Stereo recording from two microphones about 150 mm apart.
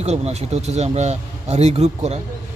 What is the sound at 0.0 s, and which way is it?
Speech, 45° right (ahead or behind).